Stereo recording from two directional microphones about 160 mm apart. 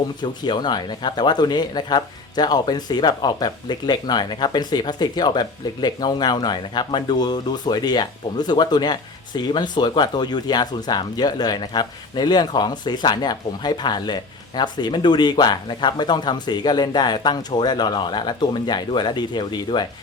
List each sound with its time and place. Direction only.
0.2 s speech: 30° left (ahead or behind)